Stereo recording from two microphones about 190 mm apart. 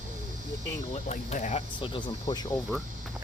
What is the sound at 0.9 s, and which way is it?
Speech, 35° left (ahead or behind).